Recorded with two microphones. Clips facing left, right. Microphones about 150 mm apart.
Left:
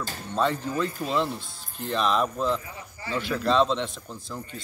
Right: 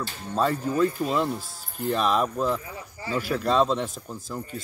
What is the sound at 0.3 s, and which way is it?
A man's voice, 10° right (ahead or behind).